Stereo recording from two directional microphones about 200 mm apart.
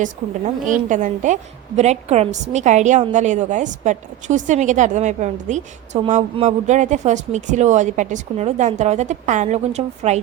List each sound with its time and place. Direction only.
0.0 s a woman's voice: 40° right (ahead or behind)